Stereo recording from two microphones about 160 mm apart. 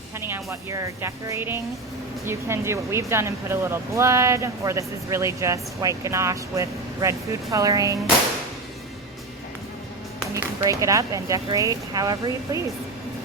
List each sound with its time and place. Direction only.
0.3 s speech: 15° right (ahead or behind)
10.3 s speech: 20° right (ahead or behind)